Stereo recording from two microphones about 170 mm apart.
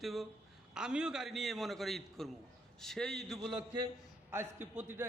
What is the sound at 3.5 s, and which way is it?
Speech, 25° right (ahead or behind).